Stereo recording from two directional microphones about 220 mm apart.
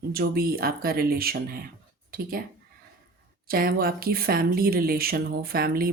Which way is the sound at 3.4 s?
40° right (ahead or behind).